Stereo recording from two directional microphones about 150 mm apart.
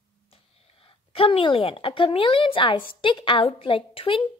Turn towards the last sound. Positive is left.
turn(degrees=35)  # may be behind; listen again after turning